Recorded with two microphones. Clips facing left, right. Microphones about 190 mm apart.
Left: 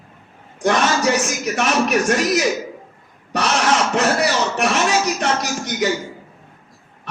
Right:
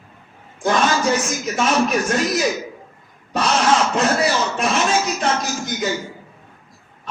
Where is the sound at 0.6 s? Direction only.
75° left (ahead or behind).